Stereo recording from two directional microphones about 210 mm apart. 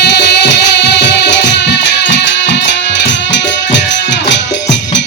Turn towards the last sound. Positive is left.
turn(degrees=55)  # may be behind; listen again after turning